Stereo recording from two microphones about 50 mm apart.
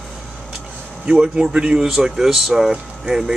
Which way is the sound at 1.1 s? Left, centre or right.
Centre.